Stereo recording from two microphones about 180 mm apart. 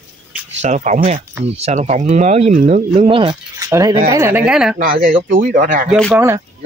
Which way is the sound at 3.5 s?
20° right (ahead or behind).